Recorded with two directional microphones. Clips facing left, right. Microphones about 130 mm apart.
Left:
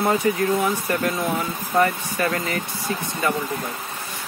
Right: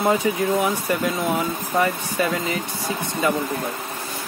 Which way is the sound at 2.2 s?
15° right (ahead or behind).